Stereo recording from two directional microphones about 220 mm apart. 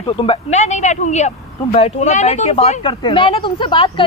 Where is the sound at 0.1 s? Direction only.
25° left (ahead or behind).